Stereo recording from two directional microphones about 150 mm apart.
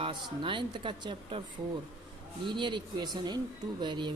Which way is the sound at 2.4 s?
30° right (ahead or behind).